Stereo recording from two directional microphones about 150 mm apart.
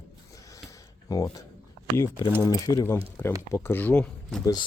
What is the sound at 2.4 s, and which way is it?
Speech, 25° left (ahead or behind).